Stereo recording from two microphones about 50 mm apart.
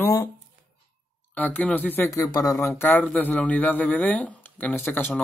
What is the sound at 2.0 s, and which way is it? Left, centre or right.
Speech, left.